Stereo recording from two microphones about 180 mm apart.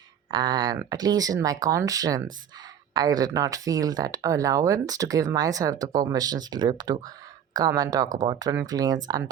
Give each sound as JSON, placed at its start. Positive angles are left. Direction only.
{"t": 0.3, "sound": "speech", "side_deg": -25}